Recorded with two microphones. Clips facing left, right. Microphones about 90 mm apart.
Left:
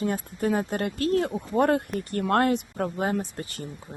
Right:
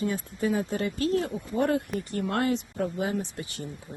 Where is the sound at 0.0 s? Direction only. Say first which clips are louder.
Left 2 dB; 50° left (ahead or behind).